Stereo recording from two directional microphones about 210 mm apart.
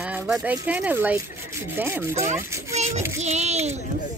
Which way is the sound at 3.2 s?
30° right (ahead or behind).